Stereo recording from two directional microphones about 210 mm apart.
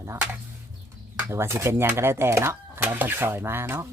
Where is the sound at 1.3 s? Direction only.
10° right (ahead or behind).